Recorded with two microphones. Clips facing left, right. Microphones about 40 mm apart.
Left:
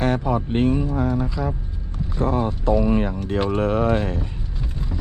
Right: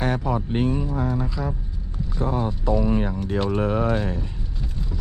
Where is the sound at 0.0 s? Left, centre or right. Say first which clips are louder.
Left 3 dB; centre.